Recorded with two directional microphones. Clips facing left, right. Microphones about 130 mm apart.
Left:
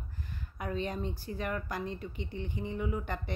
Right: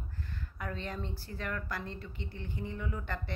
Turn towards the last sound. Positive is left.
turn(degrees=20)  # may be behind; listen again after turning